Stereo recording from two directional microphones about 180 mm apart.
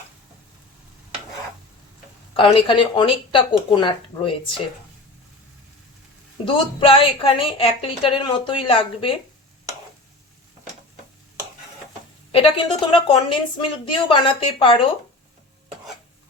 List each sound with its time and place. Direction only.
2.3 s a woman's voice: 30° left (ahead or behind)
6.4 s a woman's voice: 30° left (ahead or behind)
12.3 s a woman's voice: 30° left (ahead or behind)